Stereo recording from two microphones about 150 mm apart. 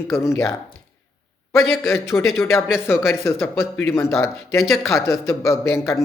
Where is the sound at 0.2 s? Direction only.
20° left (ahead or behind).